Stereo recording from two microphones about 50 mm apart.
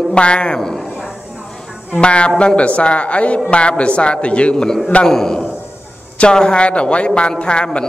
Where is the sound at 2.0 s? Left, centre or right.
Left.